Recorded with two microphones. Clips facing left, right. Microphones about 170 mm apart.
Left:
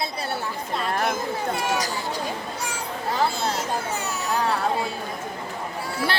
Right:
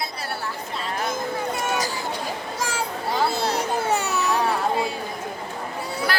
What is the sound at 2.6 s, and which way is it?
Children playing, 90° right.